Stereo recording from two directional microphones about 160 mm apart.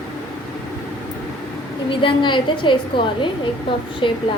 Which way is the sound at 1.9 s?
30° left (ahead or behind).